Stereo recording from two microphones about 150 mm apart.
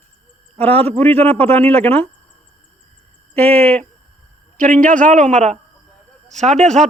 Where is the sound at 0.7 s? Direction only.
40° right (ahead or behind).